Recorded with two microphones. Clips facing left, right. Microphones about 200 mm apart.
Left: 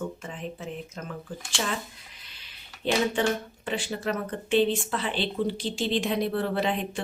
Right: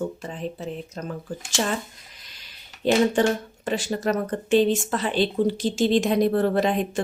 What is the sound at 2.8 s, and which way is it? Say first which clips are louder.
Speech: right 5 dB; 40° right (ahead or behind).